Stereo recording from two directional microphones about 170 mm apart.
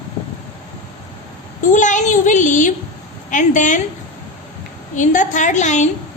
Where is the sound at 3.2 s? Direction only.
50° left (ahead or behind).